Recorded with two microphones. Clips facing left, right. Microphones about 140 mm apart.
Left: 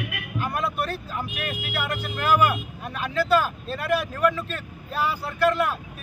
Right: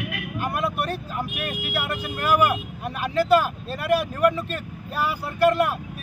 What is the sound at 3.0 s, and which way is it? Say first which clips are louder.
Speech: right 3 dB; 5° right (ahead or behind).